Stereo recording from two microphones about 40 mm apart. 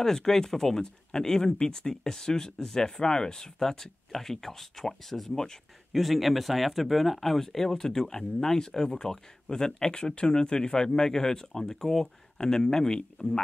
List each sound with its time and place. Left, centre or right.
0.0 s speech: centre
5.9 s speech: centre